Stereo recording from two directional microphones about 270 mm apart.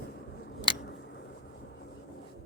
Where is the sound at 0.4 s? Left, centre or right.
Left.